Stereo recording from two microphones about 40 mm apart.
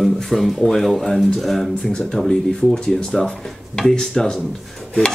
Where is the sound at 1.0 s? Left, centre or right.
Centre.